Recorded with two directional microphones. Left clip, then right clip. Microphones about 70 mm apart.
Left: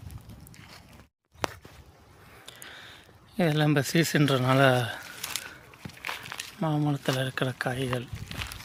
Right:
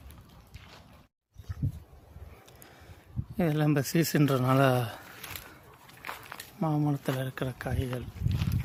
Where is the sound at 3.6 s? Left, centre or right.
Right.